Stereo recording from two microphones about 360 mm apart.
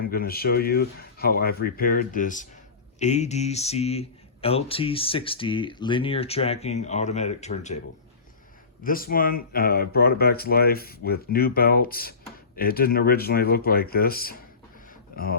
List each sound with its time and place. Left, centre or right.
0.0 s speech: left
8.8 s speech: left